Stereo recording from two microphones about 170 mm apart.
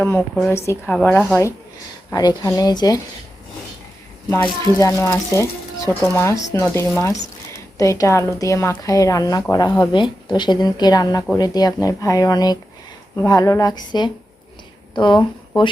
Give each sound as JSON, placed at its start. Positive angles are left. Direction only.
{"t": 0.0, "sound": "speech", "side_deg": 15}
{"t": 2.0, "sound": "a woman's voice", "side_deg": 20}
{"t": 4.4, "sound": "a woman's voice", "side_deg": 20}